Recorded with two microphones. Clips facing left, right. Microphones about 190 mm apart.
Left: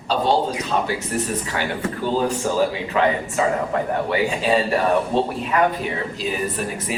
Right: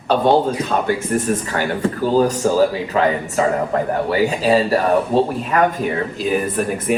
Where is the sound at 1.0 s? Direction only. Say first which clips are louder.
Right 5 dB; 50° right (ahead or behind).